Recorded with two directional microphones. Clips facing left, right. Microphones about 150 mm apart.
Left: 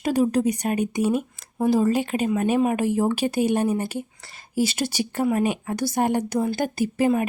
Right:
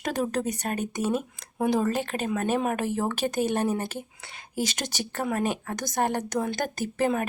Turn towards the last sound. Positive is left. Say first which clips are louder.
# left 5 dB
turn(degrees=10)  # may be behind; listen again after turning